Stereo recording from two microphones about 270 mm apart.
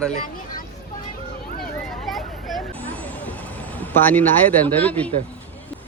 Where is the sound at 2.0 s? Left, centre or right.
Centre.